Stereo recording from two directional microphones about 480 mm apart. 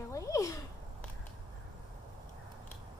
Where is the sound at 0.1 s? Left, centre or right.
Centre.